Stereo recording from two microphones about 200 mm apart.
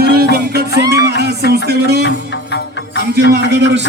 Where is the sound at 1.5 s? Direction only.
55° right (ahead or behind).